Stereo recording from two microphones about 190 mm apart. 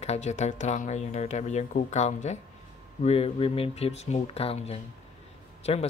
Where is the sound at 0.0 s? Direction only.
35° left (ahead or behind).